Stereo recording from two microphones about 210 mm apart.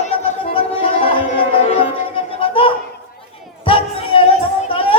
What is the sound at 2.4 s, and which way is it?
Children playing, 25° left (ahead or behind).